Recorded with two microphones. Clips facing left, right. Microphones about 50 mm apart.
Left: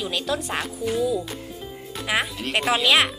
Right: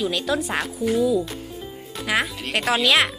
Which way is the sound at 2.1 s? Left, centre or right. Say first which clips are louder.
Right 1 dB; centre.